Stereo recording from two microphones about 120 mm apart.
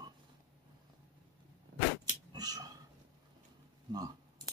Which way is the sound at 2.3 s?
30° right (ahead or behind).